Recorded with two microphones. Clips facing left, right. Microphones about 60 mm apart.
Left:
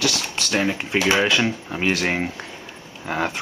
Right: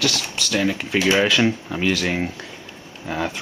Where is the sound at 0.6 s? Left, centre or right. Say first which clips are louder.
Right 1 dB; centre.